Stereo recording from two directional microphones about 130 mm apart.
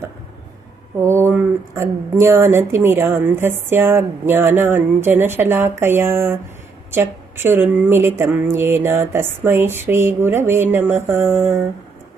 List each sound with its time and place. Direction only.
0.9 s speech: 20° right (ahead or behind)